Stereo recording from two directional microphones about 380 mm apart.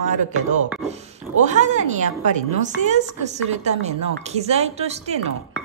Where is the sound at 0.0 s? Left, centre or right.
Centre.